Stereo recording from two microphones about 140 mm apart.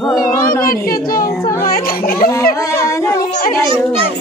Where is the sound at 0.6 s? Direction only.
90° left.